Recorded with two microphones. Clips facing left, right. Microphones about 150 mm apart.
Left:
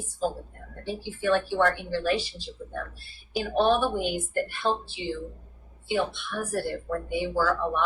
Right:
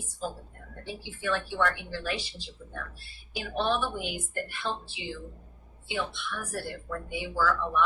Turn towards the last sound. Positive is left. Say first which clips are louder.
# left 2 dB
turn(degrees=40)  # may be behind; listen again after turning